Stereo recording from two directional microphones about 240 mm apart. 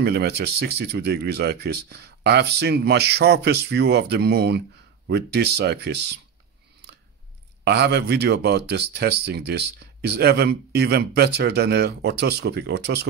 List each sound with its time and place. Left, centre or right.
0.0 s speech: right
7.6 s speech: right